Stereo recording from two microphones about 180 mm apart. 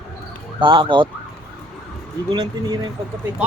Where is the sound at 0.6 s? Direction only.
25° right (ahead or behind).